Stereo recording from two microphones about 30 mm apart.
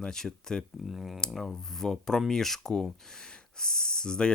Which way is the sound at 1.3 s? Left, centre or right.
Centre.